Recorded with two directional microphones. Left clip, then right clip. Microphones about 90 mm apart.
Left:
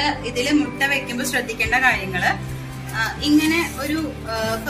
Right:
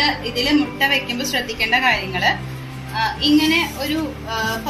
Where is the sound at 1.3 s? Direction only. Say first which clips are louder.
Right 1 dB; 55° right (ahead or behind).